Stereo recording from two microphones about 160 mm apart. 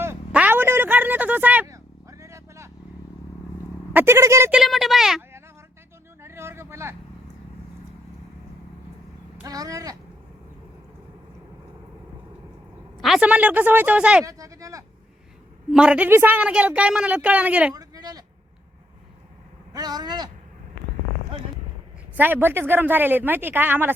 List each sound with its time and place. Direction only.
0.0 s a sound: 10° right (ahead or behind)
3.9 s a woman's voice: 15° right (ahead or behind)
4.5 s a woman's voice: centre (ahead or behind)
6.2 s a sound: 15° right (ahead or behind)
9.4 s speech: 20° right (ahead or behind)
13.0 s a woman's voice: 5° right (ahead or behind)
14.3 s a sound: 20° right (ahead or behind)
15.7 s a woman's voice: 5° right (ahead or behind)
17.7 s bleat: 25° right (ahead or behind)
19.7 s speech: 25° right (ahead or behind)
22.1 s a woman's voice: 10° right (ahead or behind)